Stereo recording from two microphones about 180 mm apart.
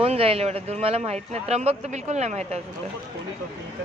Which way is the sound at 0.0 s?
30° right (ahead or behind).